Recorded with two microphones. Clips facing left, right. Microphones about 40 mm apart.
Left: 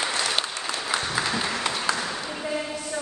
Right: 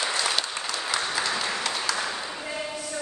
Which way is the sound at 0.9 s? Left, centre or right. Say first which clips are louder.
Left 1 dB; centre.